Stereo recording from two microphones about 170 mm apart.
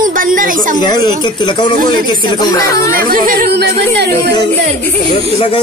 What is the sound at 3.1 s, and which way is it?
Speech, 55° right (ahead or behind).